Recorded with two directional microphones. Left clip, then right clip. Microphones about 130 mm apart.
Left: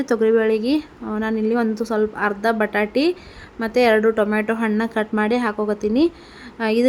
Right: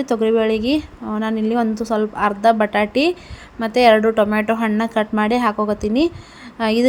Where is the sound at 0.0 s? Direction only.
15° right (ahead or behind).